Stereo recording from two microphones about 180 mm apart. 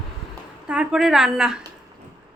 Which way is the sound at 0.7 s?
5° right (ahead or behind).